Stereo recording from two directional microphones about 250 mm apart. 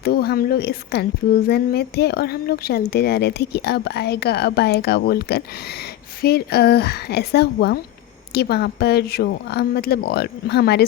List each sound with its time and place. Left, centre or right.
0.0 s a woman's voice: left